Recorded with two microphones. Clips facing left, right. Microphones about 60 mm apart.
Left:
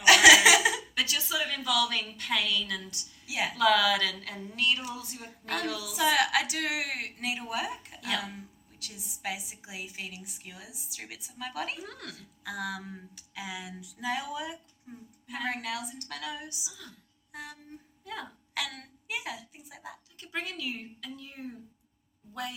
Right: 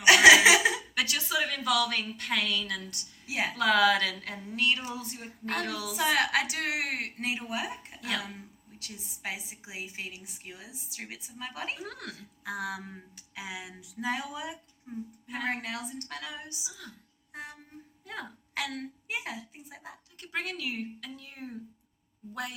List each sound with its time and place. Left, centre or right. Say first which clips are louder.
0.0 s chuckle: right 1 dB; right
0.9 s a woman's voice: right 1 dB; right
7.9 s hiccup: left 1 dB; right
8.8 s a woman's voice: left 2 dB; right
11.8 s a woman's voice: right 2 dB; right
18.0 s a woman's voice: even; right
20.1 s a woman's voice: right 2 dB; right